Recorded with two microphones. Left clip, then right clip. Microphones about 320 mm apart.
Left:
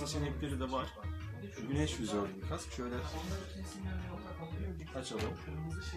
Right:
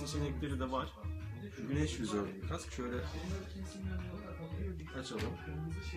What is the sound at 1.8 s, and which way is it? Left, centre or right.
Speech, centre.